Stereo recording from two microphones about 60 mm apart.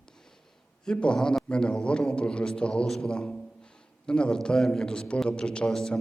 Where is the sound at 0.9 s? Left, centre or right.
Centre.